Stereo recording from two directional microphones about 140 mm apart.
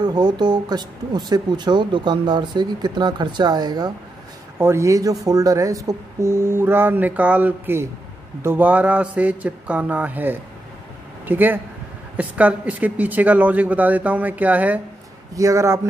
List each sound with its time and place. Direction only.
0.0 s speech: 30° right (ahead or behind)
4.6 s speech: 20° right (ahead or behind)
15.3 s speech: 20° right (ahead or behind)